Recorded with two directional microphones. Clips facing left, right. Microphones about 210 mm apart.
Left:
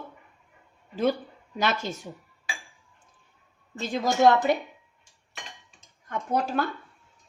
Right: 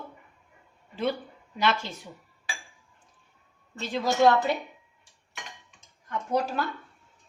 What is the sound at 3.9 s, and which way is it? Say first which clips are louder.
Speech: left 1 dB; 45° left (ahead or behind).